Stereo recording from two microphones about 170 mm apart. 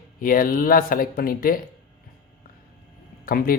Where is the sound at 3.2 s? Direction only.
60° left (ahead or behind).